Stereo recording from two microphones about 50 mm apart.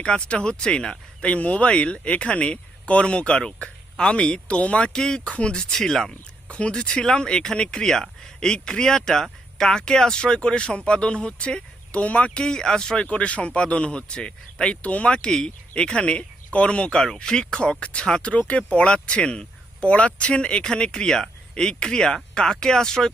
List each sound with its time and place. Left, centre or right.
0.0 s speech: centre
1.3 s speech: left
5.7 s speech: centre
6.1 s speech: left
12.4 s speech: centre